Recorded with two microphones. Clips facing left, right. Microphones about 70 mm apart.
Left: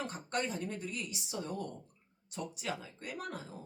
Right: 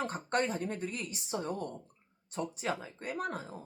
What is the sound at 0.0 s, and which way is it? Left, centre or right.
Speech, right.